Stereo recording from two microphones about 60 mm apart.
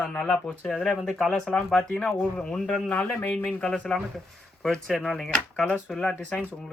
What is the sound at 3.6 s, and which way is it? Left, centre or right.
Speech, centre.